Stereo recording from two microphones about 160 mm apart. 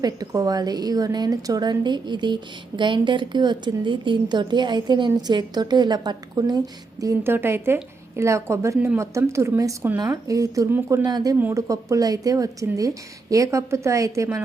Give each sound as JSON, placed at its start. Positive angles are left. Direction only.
{"t": 0.0, "sound": "a woman's voice", "side_deg": -25}